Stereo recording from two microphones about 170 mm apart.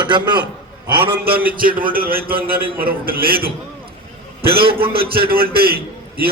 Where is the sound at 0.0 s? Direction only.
25° right (ahead or behind).